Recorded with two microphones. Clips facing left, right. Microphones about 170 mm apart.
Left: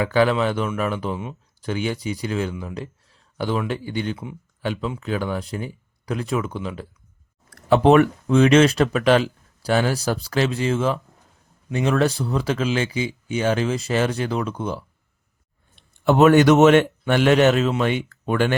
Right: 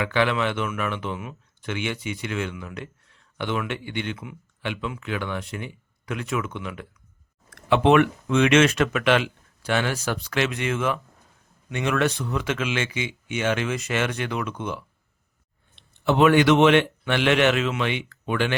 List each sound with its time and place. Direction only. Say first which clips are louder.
0.0 s speech: left 4 dB; 40° left (ahead or behind)
15.7 s a man's voice: left 4 dB; 45° left (ahead or behind)